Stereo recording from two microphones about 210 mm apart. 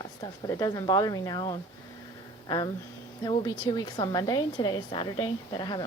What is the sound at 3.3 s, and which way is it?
A woman's voice, 20° left (ahead or behind).